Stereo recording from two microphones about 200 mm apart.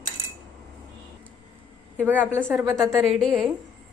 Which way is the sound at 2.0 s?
10° right (ahead or behind).